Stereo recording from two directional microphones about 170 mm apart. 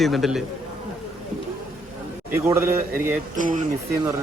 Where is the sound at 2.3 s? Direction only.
15° right (ahead or behind).